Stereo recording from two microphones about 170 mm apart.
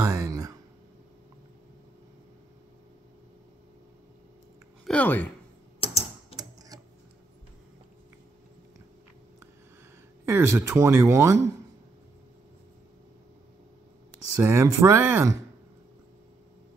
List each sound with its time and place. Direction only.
0.0 s a sound: 20° right (ahead or behind)
4.8 s speech: 10° left (ahead or behind)
10.2 s speech: 15° right (ahead or behind)
14.3 s speech: 15° right (ahead or behind)